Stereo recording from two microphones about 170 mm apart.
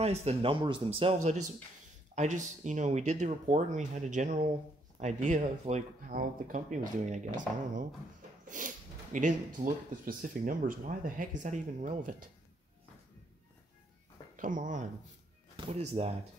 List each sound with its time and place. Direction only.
0.0 s speech: 40° right (ahead or behind)
8.5 s speech: 50° right (ahead or behind)
14.3 s speech: 50° right (ahead or behind)
15.5 s speech: 35° right (ahead or behind)